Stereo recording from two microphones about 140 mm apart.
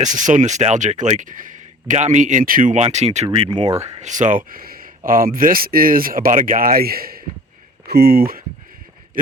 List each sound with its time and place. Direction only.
0.0 s speech: 65° right (ahead or behind); by 3.8 s 50° right (ahead or behind)
3.8 s speech: 25° right (ahead or behind)
4.0 s speech: 65° right (ahead or behind); by 8.4 s 90° right